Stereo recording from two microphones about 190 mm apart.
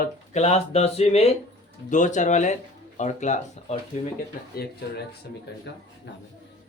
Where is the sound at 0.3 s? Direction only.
35° left (ahead or behind).